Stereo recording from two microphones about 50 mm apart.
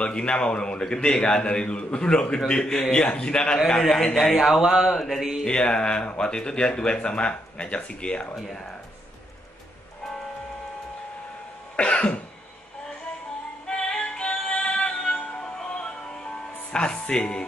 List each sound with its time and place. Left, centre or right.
0.0 s a man's voice: left
4.4 s speech: centre
4.8 s mantra: centre
5.5 s speech: centre
11.7 s cough: left
13.7 s music: centre
16.7 s speech: left